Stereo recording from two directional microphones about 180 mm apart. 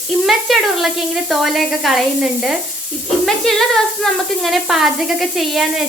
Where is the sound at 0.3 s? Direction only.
Centre (ahead or behind).